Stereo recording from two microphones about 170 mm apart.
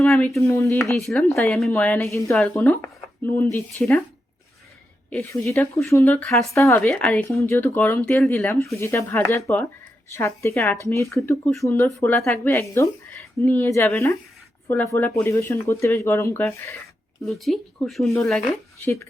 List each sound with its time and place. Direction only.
0.0 s speech: 10° left (ahead or behind)
0.9 s speech: 5° left (ahead or behind)
5.9 s speech: 15° left (ahead or behind)
17.2 s speech: centre (ahead or behind)